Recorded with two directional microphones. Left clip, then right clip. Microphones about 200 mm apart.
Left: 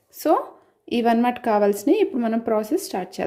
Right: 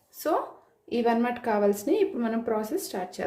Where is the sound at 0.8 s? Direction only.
45° left (ahead or behind).